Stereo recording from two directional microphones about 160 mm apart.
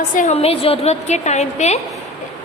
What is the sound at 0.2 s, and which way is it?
A woman's voice, 40° left (ahead or behind).